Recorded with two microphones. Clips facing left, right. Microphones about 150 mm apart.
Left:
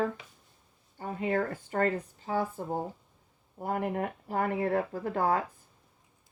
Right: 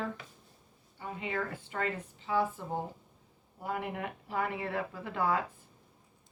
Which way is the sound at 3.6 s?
45° left (ahead or behind).